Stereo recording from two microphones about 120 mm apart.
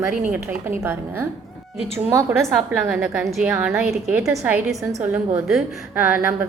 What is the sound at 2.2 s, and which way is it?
A woman's voice, 10° right (ahead or behind).